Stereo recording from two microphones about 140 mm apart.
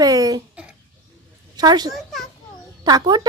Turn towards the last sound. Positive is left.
turn(degrees=-30)  # may be behind; listen again after turning